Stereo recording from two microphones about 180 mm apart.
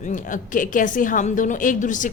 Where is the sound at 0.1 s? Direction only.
45° left (ahead or behind).